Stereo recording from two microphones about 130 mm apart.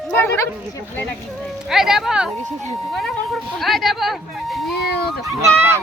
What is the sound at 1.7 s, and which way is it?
Speech, 5° right (ahead or behind).